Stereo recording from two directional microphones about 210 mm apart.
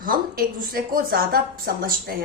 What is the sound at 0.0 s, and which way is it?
A woman's voice, 40° right (ahead or behind).